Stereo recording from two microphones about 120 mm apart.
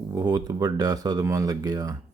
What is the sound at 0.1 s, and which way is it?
Speech, 35° right (ahead or behind).